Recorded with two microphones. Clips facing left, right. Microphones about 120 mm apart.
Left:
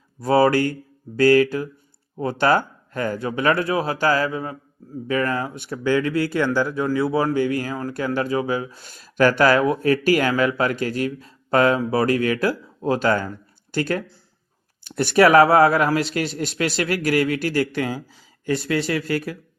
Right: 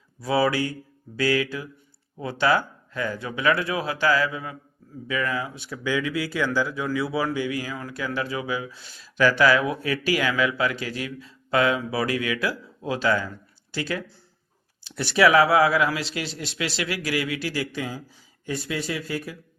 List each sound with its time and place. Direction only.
0.2 s speech: 50° left (ahead or behind); by 19.4 s 70° left (ahead or behind)